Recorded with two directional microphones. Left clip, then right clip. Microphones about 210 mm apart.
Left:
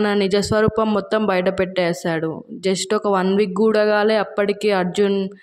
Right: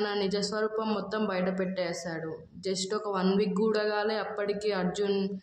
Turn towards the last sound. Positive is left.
turn(degrees=35)  # may be behind; listen again after turning